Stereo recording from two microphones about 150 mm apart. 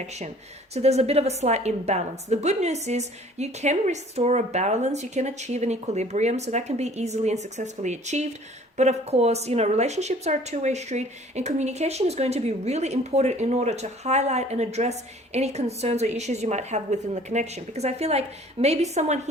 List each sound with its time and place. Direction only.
0.7 s speech: 45° right (ahead or behind)